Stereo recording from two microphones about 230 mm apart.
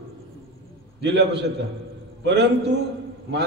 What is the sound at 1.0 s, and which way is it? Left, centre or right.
Speech, right.